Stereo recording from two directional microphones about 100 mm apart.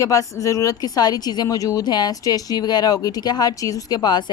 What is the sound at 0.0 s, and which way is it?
A woman's voice, 35° left (ahead or behind).